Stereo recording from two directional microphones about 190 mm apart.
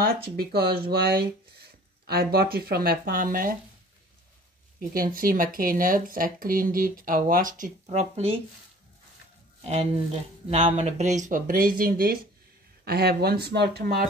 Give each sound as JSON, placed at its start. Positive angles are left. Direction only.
{"t": 0.4, "sound": "speech", "side_deg": -55}
{"t": 4.7, "sound": "speech", "side_deg": -50}
{"t": 9.6, "sound": "speech", "side_deg": -35}